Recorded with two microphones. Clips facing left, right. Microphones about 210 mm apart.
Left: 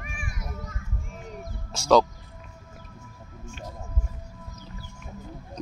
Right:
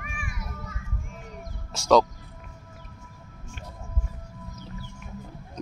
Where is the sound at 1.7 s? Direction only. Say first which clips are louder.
Even; centre (ahead or behind).